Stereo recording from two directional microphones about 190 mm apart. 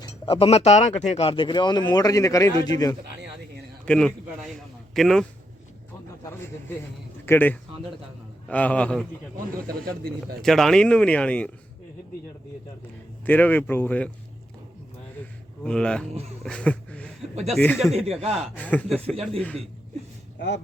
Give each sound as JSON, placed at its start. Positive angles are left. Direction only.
{"t": 0.0, "sound": "speech", "side_deg": 30}
{"t": 3.8, "sound": "speech", "side_deg": 5}
{"t": 6.2, "sound": "speech", "side_deg": 10}
{"t": 9.6, "sound": "speech", "side_deg": -50}
{"t": 10.2, "sound": "speech", "side_deg": 0}
{"t": 13.2, "sound": "speech", "side_deg": 10}
{"t": 15.6, "sound": "speech", "side_deg": 5}
{"t": 16.4, "sound": "a sound", "side_deg": 5}
{"t": 17.3, "sound": "speech", "side_deg": -35}
{"t": 17.6, "sound": "speech", "side_deg": 10}
{"t": 17.9, "sound": "speech", "side_deg": -30}
{"t": 18.5, "sound": "speech", "side_deg": 10}